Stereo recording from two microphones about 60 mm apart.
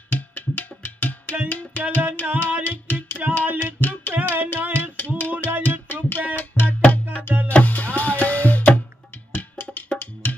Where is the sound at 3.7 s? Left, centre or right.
Left.